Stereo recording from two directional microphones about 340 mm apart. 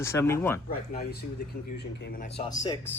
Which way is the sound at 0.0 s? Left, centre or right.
Centre.